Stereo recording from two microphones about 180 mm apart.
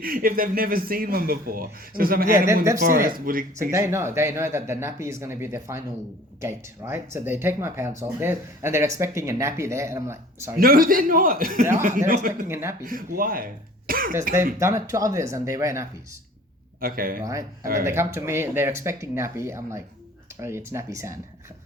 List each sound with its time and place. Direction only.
0.0 s a man's voice: 55° right (ahead or behind)
3.7 s speech: 15° right (ahead or behind)
10.6 s a man's voice: 55° right (ahead or behind)
12.5 s speech: 15° right (ahead or behind)
12.8 s a man's voice: 50° right (ahead or behind)
14.6 s speech: 15° right (ahead or behind)
16.8 s a man's voice: 55° right (ahead or behind)
17.2 s speech: 15° right (ahead or behind)